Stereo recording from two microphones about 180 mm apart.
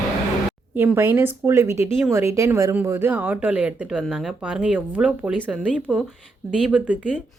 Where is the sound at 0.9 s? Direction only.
10° right (ahead or behind).